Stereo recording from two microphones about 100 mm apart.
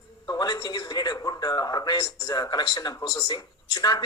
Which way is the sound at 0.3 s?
45° left (ahead or behind).